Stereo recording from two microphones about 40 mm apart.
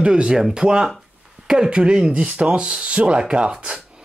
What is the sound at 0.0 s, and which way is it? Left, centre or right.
Speech, right.